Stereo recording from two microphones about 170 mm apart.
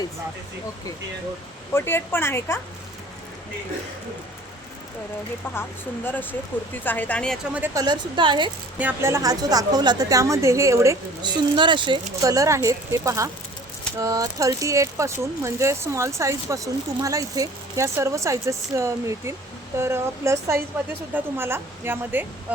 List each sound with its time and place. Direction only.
1.7 s speech: 15° left (ahead or behind)
6.8 s speech: 10° left (ahead or behind)
7.5 s a woman's voice: 15° right (ahead or behind)
8.8 s a woman's voice: 10° right (ahead or behind)